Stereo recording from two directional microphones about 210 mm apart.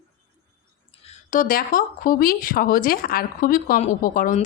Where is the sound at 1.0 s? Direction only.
35° left (ahead or behind).